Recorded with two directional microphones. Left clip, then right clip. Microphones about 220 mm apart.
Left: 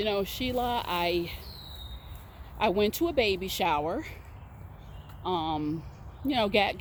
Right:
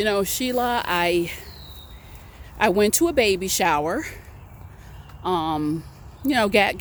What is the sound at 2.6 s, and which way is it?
Speech, 30° right (ahead or behind).